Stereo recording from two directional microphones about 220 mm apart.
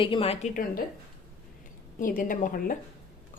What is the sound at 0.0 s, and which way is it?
Speech, 25° left (ahead or behind).